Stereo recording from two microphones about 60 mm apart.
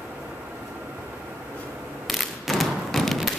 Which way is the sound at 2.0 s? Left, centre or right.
Centre.